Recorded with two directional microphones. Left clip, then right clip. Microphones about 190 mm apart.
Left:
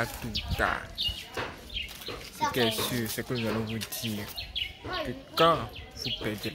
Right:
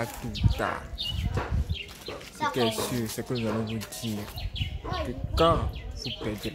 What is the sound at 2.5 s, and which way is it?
Speech, 5° right (ahead or behind).